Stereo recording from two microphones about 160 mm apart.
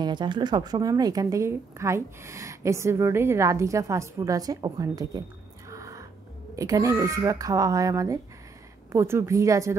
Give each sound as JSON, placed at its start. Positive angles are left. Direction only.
{"t": 0.0, "sound": "speech", "side_deg": -30}
{"t": 5.7, "sound": "music", "side_deg": -20}
{"t": 6.5, "sound": "a woman's voice", "side_deg": -20}